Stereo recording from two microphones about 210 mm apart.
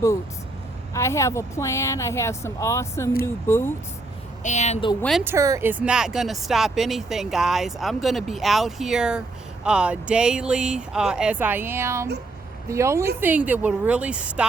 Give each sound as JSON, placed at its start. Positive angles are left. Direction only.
{"t": 0.9, "sound": "a woman's voice", "side_deg": 15}
{"t": 4.4, "sound": "a woman's voice", "side_deg": 35}
{"t": 5.2, "sound": "a woman's voice", "side_deg": -15}